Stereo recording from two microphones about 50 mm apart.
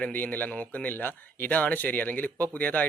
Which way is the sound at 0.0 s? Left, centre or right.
Left.